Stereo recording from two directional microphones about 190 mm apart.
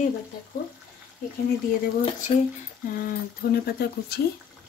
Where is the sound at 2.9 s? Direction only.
50° left (ahead or behind).